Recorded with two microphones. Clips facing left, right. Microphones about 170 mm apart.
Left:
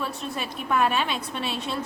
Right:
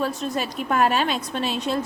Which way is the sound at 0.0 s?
40° right (ahead or behind).